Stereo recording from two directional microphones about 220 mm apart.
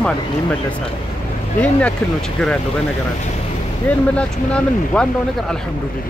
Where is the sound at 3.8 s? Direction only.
5° left (ahead or behind).